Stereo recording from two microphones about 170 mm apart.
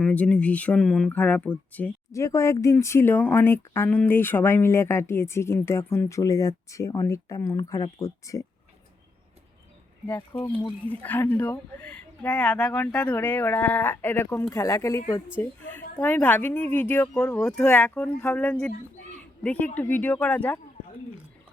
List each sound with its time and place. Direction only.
0.0 s speech: 5° left (ahead or behind)
10.1 s speech: 15° left (ahead or behind)